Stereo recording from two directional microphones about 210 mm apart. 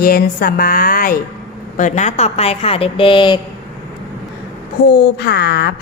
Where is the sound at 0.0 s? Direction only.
45° left (ahead or behind); by 3.4 s 20° left (ahead or behind).